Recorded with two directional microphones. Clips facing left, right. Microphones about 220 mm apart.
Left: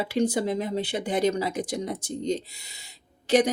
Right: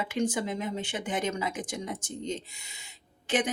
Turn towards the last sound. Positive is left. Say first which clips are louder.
# left 7 dB
turn(degrees=40)  # may be behind; listen again after turning